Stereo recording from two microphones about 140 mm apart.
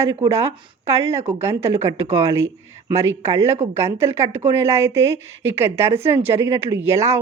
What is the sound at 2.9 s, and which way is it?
A woman's voice, 20° right (ahead or behind).